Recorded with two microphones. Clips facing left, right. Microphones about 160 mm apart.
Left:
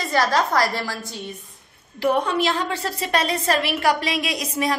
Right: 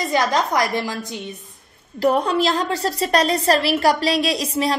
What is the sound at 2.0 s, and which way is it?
A woman's voice, 35° right (ahead or behind).